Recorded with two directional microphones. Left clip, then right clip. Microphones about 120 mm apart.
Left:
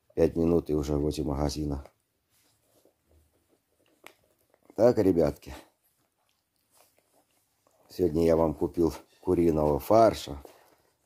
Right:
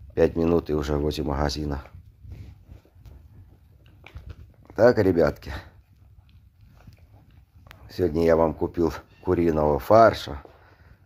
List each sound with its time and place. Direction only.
0.1 s speech: 30° left (ahead or behind)
4.7 s speech: 25° left (ahead or behind)
7.8 s speech: 35° left (ahead or behind)